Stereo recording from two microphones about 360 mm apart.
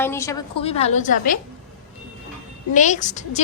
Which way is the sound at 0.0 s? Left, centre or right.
Centre.